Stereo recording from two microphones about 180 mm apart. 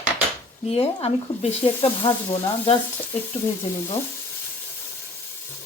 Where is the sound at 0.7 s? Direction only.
35° left (ahead or behind).